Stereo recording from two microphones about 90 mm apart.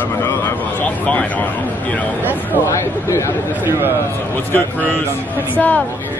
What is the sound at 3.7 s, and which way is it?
Speech, 25° right (ahead or behind).